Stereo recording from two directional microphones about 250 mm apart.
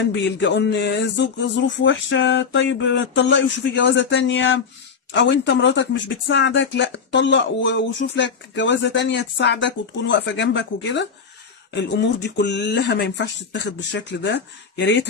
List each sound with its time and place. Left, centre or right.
0.1 s speech: left